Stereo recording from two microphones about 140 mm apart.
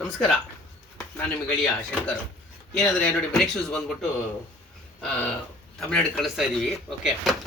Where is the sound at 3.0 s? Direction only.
5° left (ahead or behind).